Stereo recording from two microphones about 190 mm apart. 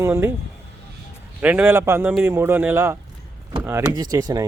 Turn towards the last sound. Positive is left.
turn(degrees=-20)  # may be behind; listen again after turning